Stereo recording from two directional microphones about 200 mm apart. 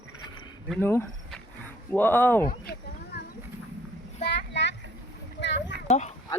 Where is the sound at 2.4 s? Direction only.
50° left (ahead or behind).